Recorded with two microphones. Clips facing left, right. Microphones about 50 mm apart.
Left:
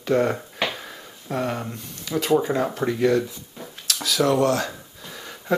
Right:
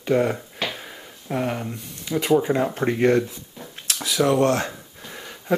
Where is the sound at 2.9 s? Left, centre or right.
Right.